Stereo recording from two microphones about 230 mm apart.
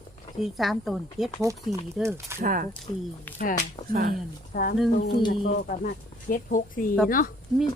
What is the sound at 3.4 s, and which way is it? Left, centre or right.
Speech, left.